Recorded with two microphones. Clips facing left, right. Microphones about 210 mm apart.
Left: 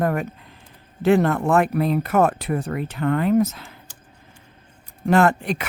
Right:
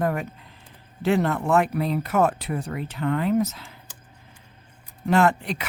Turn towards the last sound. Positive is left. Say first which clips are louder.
# left 2 dB
turn(degrees=50)  # may be behind; listen again after turning